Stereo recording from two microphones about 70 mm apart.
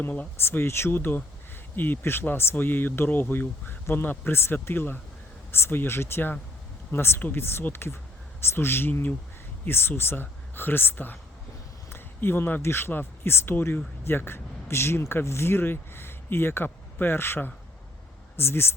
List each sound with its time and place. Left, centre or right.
0.0 s speech: left